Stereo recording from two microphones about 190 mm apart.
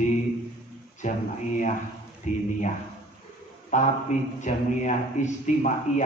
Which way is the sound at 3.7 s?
40° left (ahead or behind).